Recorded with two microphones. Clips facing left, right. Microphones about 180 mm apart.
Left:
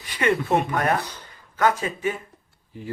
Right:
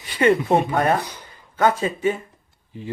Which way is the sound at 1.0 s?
15° right (ahead or behind).